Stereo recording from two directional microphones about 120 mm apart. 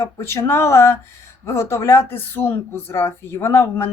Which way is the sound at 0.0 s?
20° left (ahead or behind).